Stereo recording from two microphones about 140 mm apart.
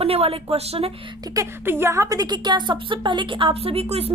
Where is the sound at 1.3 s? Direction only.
20° right (ahead or behind).